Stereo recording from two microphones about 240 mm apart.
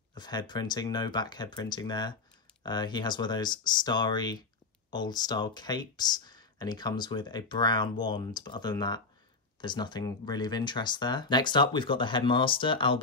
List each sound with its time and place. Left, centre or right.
0.1 s speech: centre